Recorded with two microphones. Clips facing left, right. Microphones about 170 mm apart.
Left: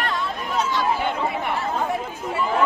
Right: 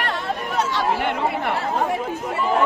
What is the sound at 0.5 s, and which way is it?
Chatter, 70° right (ahead or behind).